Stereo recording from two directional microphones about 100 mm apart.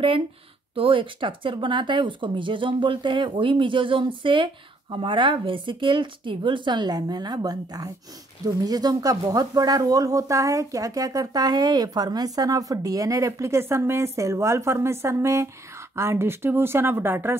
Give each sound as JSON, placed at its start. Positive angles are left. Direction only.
{"t": 0.7, "sound": "speech", "side_deg": -60}